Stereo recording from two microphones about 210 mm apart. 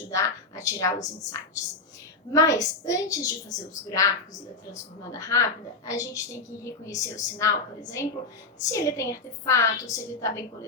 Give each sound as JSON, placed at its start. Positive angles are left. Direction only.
{"t": 0.1, "sound": "a sound", "side_deg": 15}
{"t": 2.3, "sound": "a woman's voice", "side_deg": 15}
{"t": 5.1, "sound": "a woman's voice", "side_deg": 15}